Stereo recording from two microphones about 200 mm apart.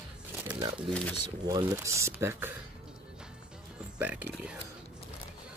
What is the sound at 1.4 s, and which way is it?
Speech, 15° right (ahead or behind).